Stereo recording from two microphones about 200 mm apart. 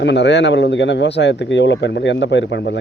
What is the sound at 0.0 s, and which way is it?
Speech, 60° left (ahead or behind).